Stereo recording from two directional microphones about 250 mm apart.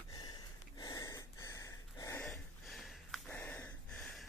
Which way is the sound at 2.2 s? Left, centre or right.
Centre.